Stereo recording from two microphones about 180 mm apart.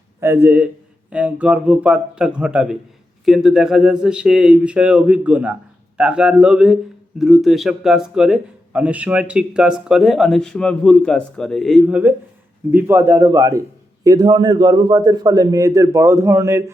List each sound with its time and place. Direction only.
0.2 s a man's voice: 15° right (ahead or behind)